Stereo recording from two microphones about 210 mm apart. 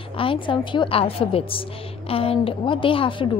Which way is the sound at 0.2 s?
25° left (ahead or behind).